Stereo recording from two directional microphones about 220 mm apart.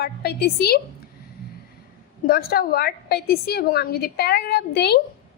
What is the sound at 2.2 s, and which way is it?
A woman's voice, 40° left (ahead or behind).